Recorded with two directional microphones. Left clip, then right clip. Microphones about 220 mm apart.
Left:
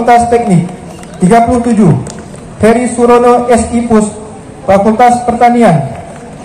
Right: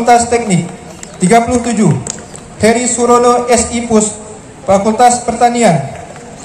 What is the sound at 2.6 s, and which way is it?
A man's voice, 20° right (ahead or behind).